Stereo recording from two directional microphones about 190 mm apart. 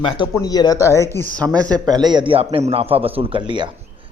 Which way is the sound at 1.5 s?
20° right (ahead or behind).